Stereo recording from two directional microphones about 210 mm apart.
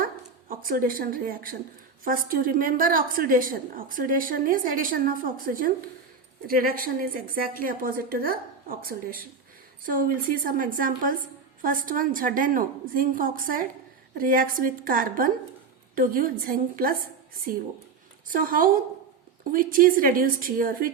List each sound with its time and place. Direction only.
0.0 s dog: 40° right (ahead or behind)
2.0 s a woman's voice: 40° right (ahead or behind)
18.3 s a woman's voice: 40° right (ahead or behind)